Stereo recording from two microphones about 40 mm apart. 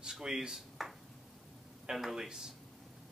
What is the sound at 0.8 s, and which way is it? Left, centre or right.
A man's voice, centre.